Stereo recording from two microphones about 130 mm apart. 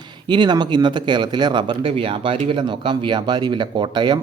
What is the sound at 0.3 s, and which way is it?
Speech, 35° right (ahead or behind).